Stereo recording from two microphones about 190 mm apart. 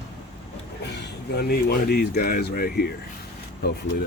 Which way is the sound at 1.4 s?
55° left (ahead or behind).